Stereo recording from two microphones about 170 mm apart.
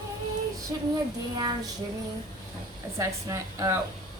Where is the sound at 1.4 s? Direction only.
25° right (ahead or behind).